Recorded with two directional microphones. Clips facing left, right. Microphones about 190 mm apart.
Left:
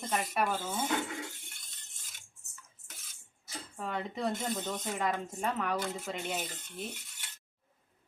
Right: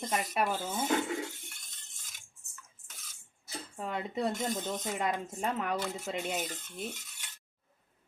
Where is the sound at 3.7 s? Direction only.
15° right (ahead or behind).